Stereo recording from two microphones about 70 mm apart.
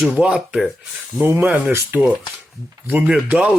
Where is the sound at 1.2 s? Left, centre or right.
Right.